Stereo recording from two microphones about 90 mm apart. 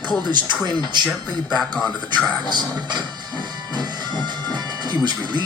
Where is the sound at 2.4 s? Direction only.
55° right (ahead or behind).